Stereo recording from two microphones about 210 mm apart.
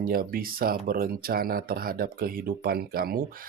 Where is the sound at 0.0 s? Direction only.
45° right (ahead or behind).